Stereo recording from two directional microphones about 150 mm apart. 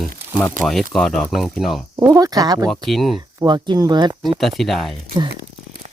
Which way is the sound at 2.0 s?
20° right (ahead or behind).